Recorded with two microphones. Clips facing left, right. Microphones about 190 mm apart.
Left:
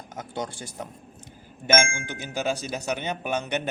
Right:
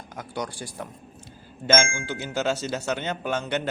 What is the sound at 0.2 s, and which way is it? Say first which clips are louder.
Speech: right 1 dB; 25° left (ahead or behind).